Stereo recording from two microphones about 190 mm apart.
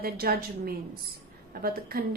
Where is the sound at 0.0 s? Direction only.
50° right (ahead or behind).